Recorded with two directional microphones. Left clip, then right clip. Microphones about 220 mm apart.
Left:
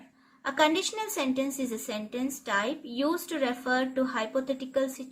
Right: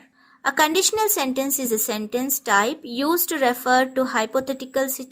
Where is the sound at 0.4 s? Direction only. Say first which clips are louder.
Right 6 dB; 50° right (ahead or behind).